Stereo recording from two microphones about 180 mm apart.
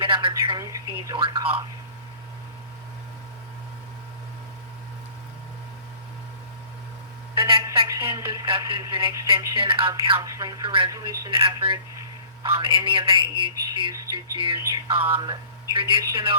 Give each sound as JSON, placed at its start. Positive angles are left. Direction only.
{"t": 0.0, "sound": "telephone", "side_deg": -30}
{"t": 0.4, "sound": "speech", "side_deg": -20}
{"t": 7.3, "sound": "a sound", "side_deg": -30}
{"t": 8.0, "sound": "speech", "side_deg": -25}
{"t": 11.3, "sound": "speech", "side_deg": -30}